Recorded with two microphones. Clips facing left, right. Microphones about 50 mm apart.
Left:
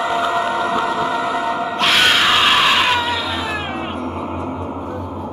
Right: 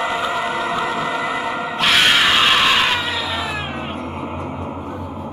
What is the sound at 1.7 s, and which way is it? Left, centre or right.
Screaming, centre.